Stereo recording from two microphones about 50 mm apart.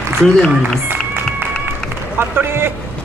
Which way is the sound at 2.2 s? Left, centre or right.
Right.